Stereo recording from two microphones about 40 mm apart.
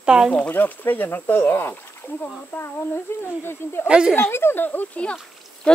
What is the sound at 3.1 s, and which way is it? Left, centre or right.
Speech, left.